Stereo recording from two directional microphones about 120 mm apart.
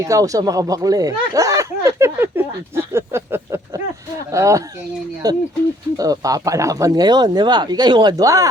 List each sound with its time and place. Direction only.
0.0 s speech: 30° right (ahead or behind)